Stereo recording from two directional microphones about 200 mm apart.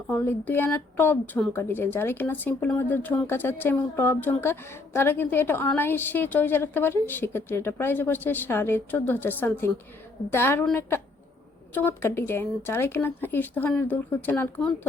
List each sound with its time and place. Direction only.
0.1 s a woman's voice: 10° left (ahead or behind)